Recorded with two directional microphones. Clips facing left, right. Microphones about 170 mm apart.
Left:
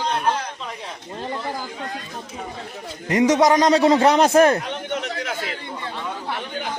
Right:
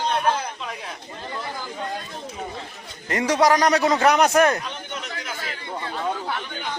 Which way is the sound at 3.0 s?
20° left (ahead or behind).